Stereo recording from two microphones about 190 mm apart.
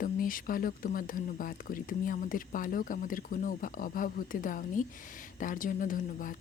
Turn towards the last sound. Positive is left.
turn(degrees=45)  # may be behind; listen again after turning